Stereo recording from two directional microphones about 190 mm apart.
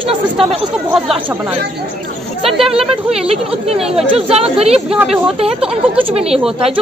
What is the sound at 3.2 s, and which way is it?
Speech, 30° right (ahead or behind).